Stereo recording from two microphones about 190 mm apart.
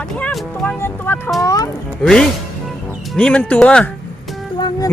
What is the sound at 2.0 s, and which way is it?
Speech, centre (ahead or behind).